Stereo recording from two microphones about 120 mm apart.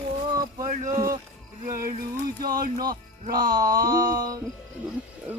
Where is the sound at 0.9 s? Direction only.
30° right (ahead or behind).